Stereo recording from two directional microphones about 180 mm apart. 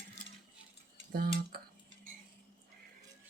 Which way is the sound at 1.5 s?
60° right (ahead or behind).